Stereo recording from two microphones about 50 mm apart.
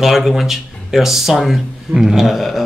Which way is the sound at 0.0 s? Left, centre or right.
Centre.